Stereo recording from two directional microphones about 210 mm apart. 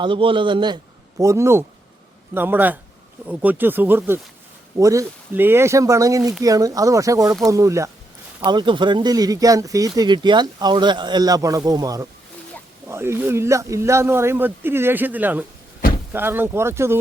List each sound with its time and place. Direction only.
0.0 s a man's voice: 25° right (ahead or behind)